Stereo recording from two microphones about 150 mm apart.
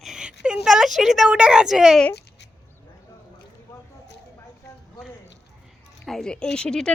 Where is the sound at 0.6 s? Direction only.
5° right (ahead or behind).